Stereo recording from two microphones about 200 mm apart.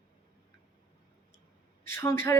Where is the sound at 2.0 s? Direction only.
15° left (ahead or behind).